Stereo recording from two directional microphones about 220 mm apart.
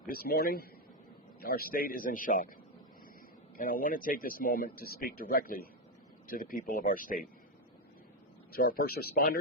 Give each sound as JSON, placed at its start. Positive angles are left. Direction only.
{"t": 0.1, "sound": "a man's voice", "side_deg": 45}
{"t": 3.6, "sound": "speech", "side_deg": 40}
{"t": 8.5, "sound": "speech", "side_deg": 40}